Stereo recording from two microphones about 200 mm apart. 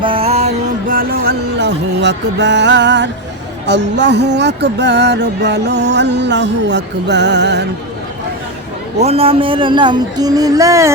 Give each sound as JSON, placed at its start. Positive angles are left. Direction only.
{"t": 0.0, "sound": "music", "side_deg": -30}
{"t": 9.0, "sound": "speech", "side_deg": -30}